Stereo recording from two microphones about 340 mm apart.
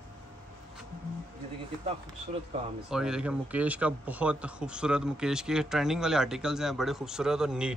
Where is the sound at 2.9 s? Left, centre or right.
Centre.